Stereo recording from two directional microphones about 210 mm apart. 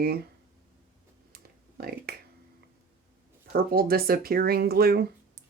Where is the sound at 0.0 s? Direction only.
45° right (ahead or behind).